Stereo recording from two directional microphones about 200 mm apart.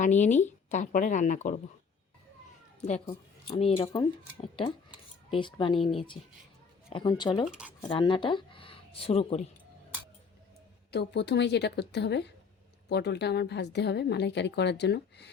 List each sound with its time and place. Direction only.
0.0 s speech: 35° left (ahead or behind)
3.1 s a woman's voice: 25° left (ahead or behind)
10.9 s a woman's voice: 60° left (ahead or behind)